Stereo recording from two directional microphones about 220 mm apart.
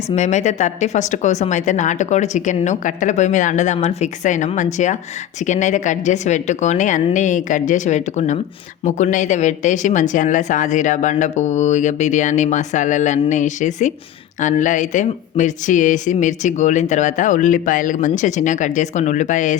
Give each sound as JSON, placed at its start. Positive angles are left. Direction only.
{"t": 0.1, "sound": "speech", "side_deg": 30}